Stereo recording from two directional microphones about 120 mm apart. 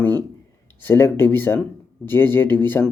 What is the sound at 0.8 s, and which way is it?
Speech, 20° left (ahead or behind).